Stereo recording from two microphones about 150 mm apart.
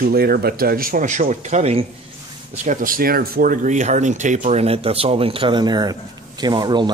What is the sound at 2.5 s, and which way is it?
Speech, 55° right (ahead or behind).